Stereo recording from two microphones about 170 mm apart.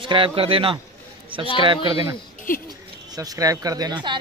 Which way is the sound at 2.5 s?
55° left (ahead or behind).